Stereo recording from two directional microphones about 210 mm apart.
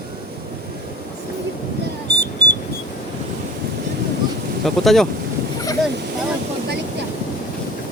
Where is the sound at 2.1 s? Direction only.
50° right (ahead or behind).